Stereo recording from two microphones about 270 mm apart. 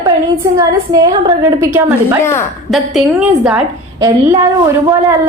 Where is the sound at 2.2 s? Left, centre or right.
Centre.